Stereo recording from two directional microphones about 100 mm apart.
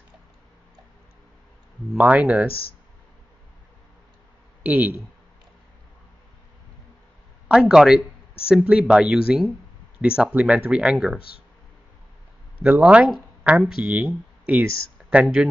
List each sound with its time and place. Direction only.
2.0 s speech: 15° right (ahead or behind)
4.6 s speech: 15° right (ahead or behind)
7.4 s speech: 10° right (ahead or behind)
12.6 s speech: 10° right (ahead or behind)